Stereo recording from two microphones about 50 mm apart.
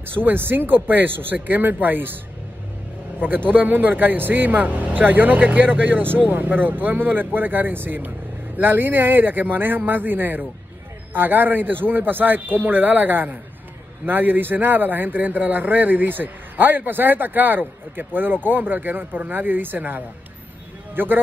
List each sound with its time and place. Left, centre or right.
0.0 s a man's voice: right
3.2 s a man's voice: right